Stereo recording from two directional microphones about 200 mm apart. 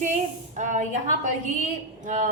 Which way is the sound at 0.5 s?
40° right (ahead or behind).